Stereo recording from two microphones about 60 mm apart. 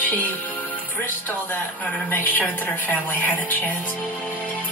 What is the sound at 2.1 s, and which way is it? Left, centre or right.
A woman's voice, left.